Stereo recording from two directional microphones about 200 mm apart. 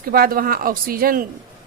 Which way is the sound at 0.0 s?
50° right (ahead or behind).